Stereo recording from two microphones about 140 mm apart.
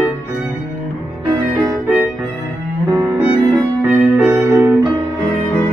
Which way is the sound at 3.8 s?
15° right (ahead or behind).